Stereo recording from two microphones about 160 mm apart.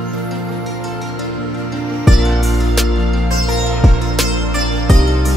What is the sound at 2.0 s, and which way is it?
Music, centre (ahead or behind).